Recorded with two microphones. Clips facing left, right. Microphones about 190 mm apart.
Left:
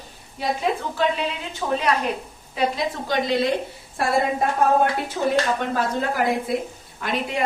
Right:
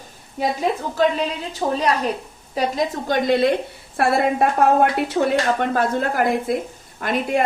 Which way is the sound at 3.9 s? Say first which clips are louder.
Right 3 dB; 65° right (ahead or behind).